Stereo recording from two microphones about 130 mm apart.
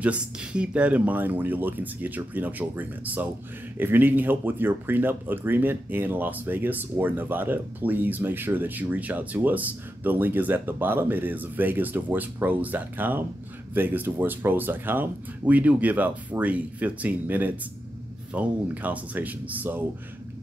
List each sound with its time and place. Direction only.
0.0 s speech: 10° right (ahead or behind)